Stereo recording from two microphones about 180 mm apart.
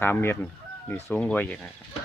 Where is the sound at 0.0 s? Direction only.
10° left (ahead or behind).